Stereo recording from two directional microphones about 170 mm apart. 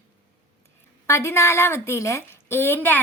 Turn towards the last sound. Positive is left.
turn(degrees=10)  # may be behind; listen again after turning